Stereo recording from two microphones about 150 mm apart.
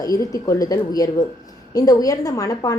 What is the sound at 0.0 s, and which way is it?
A woman's voice, 25° left (ahead or behind).